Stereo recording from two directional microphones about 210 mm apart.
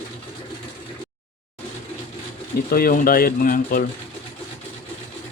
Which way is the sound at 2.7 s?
40° left (ahead or behind).